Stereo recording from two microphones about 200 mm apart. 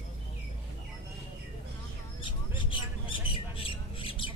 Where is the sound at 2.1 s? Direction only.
25° left (ahead or behind).